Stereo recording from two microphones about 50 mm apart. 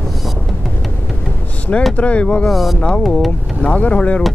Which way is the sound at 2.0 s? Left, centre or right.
Left.